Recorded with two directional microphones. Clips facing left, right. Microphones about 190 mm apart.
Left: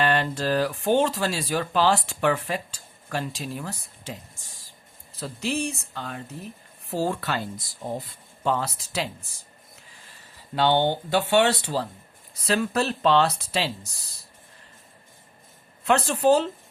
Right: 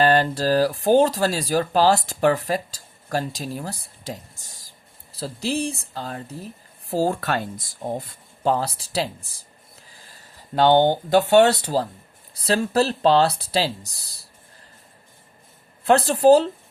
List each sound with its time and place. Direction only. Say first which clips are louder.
0.0 s speech: right 5 dB; 35° right (ahead or behind)
8.4 s speech: right 4 dB; 35° right (ahead or behind)
15.8 s speech: right 5 dB; 35° right (ahead or behind)